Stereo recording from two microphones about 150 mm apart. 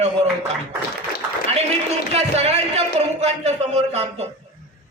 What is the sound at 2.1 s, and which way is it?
A man's voice, 45° right (ahead or behind).